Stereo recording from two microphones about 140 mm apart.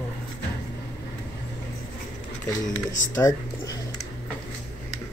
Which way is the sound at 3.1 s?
25° left (ahead or behind).